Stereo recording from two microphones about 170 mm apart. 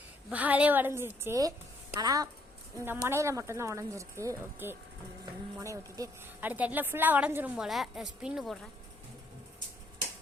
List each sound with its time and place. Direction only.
0.3 s a woman's voice: 10° right (ahead or behind)